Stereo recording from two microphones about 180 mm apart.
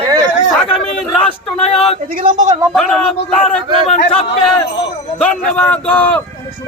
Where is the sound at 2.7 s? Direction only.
5° left (ahead or behind).